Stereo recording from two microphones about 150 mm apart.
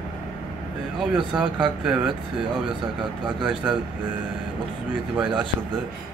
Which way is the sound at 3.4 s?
5° right (ahead or behind).